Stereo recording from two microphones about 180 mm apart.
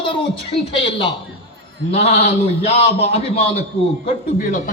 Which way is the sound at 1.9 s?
35° left (ahead or behind).